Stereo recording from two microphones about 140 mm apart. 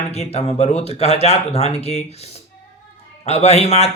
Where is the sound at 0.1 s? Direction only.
50° left (ahead or behind).